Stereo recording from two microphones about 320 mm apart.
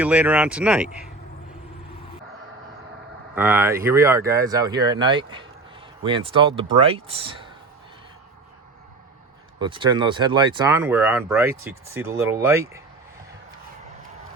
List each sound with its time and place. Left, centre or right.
0.0 s speech: centre
3.3 s speech: centre
9.6 s speech: centre